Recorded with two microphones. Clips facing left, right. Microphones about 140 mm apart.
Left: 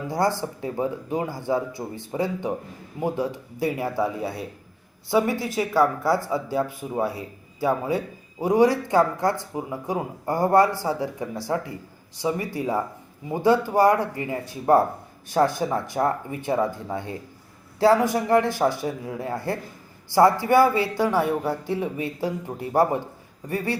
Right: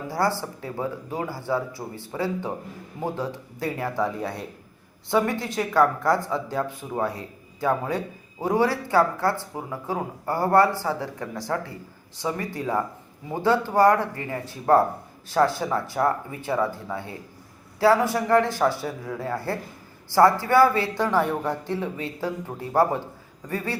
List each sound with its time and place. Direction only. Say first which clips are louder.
0.1 s speech: left 1 dB; 20° left (ahead or behind)